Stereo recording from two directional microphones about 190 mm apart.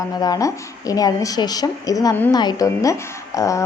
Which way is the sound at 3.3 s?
15° left (ahead or behind).